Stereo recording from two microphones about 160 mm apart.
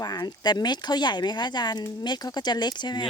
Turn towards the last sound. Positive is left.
turn(degrees=25)  # may be behind; listen again after turning